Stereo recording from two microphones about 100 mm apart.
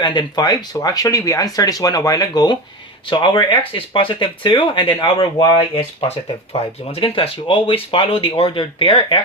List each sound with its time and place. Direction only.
0.0 s speech: 50° left (ahead or behind)